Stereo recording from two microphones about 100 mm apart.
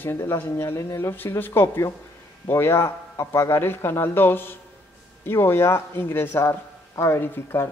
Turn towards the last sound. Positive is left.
turn(degrees=25)  # may be behind; listen again after turning